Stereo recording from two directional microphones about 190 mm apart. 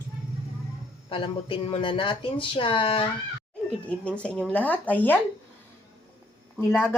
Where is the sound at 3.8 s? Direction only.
5° left (ahead or behind).